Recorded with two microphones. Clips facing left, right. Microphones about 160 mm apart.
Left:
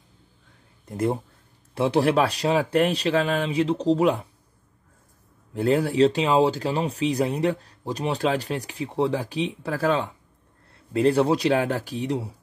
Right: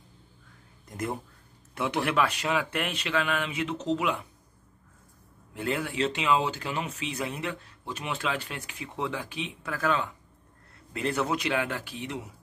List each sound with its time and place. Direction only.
0.8 s speech: 30° left (ahead or behind)
5.5 s speech: 35° left (ahead or behind)